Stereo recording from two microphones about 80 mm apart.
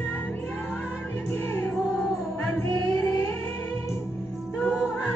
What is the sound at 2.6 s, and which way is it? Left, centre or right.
Music, left.